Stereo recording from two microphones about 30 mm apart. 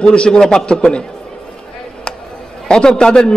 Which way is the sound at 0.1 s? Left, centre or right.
Left.